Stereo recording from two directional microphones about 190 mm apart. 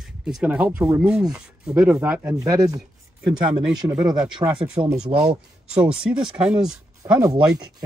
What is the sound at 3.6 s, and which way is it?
Speech, 5° right (ahead or behind).